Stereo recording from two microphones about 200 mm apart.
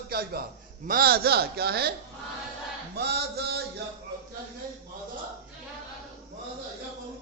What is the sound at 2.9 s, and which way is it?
Speech, 55° right (ahead or behind).